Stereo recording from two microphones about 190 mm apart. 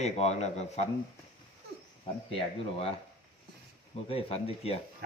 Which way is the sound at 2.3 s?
30° left (ahead or behind).